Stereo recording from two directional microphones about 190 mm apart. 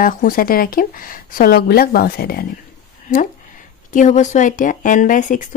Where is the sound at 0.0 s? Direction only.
45° left (ahead or behind).